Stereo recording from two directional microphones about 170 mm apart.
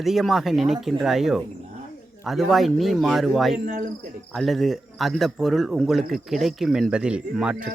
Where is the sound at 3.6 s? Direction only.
60° right (ahead or behind).